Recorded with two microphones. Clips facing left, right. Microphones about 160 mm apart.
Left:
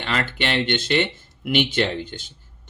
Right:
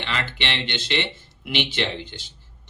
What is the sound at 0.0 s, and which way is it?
Speech, 45° left (ahead or behind).